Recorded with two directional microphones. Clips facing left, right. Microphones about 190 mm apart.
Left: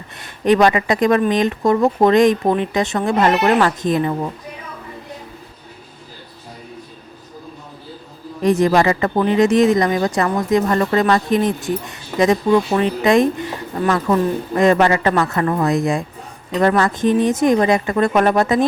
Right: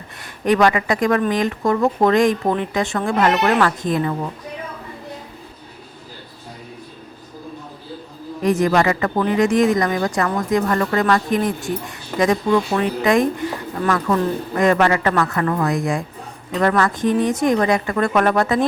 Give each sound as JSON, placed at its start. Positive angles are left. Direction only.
{"t": 0.2, "sound": "speech", "side_deg": 25}
{"t": 8.4, "sound": "speech", "side_deg": 30}